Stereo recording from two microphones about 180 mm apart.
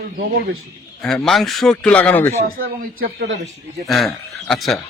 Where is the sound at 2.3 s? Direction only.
55° right (ahead or behind).